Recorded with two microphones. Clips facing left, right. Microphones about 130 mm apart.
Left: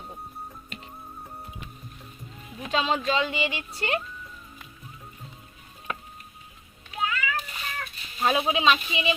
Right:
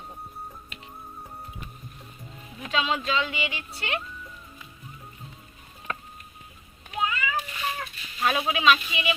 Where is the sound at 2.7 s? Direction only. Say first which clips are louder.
Left 1 dB; 35° left (ahead or behind).